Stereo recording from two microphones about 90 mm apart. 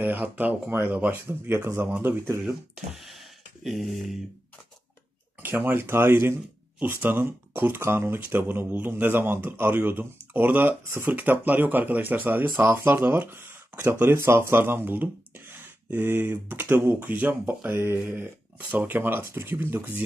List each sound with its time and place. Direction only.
0.0 s speech: 20° right (ahead or behind)
2.4 s speech: 5° right (ahead or behind)
5.4 s speech: 20° right (ahead or behind)